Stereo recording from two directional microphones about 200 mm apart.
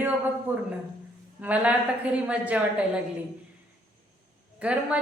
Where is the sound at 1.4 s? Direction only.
5° right (ahead or behind).